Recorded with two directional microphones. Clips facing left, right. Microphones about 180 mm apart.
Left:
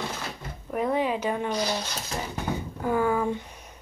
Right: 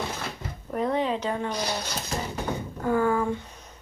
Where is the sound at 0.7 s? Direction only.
10° left (ahead or behind).